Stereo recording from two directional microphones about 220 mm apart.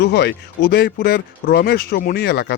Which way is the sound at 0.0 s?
50° left (ahead or behind).